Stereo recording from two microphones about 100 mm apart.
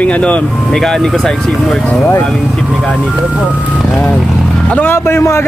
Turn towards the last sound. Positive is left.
turn(degrees=25)  # may be behind; listen again after turning